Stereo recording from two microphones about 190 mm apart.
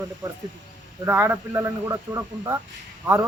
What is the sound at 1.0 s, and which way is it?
A man's voice, 10° right (ahead or behind).